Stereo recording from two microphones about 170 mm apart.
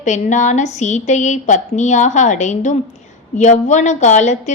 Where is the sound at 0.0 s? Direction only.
45° left (ahead or behind).